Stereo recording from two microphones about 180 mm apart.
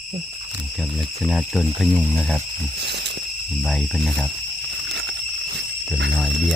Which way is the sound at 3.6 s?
Centre (ahead or behind).